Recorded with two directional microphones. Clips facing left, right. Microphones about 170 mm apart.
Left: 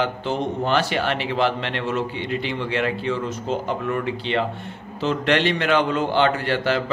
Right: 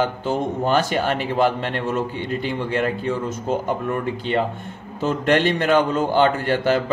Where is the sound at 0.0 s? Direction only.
45° right (ahead or behind).